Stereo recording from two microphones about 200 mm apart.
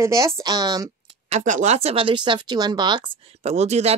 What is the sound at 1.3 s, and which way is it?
Speech, 35° right (ahead or behind).